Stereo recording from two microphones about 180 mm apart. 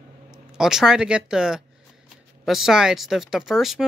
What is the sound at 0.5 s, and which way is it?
Speech, 5° right (ahead or behind).